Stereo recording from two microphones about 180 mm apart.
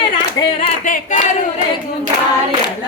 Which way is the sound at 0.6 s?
45° left (ahead or behind).